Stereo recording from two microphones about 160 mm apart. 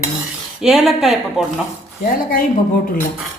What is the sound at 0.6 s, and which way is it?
Speech, centre (ahead or behind).